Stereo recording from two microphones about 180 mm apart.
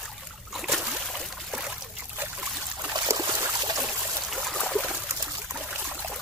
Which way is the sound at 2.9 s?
20° right (ahead or behind).